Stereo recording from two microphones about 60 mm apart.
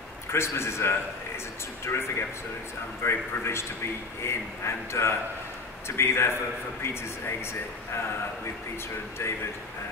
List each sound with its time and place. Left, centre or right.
0.3 s a man's voice: left